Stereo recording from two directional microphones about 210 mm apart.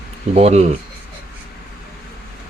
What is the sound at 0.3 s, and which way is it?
Speech, 30° right (ahead or behind).